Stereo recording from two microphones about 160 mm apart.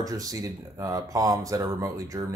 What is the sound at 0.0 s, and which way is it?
Speech, 20° right (ahead or behind).